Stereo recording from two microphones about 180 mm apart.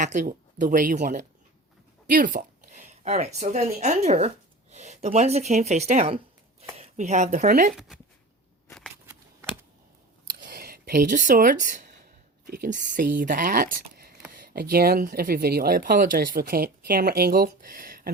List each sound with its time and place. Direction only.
0.0 s speech: 45° right (ahead or behind)
7.7 s speech: centre (ahead or behind)
10.2 s a sound: 55° right (ahead or behind)
12.5 s speech: 50° right (ahead or behind)